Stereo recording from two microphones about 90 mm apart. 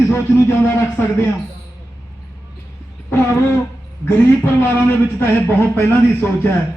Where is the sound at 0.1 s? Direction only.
25° left (ahead or behind).